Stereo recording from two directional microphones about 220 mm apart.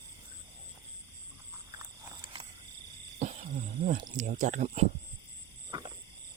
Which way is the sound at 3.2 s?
35° right (ahead or behind).